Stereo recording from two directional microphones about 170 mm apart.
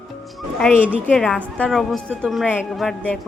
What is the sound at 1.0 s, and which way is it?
A woman's voice, 5° left (ahead or behind).